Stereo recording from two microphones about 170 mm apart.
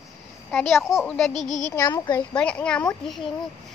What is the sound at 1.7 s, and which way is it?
Speech, 20° left (ahead or behind).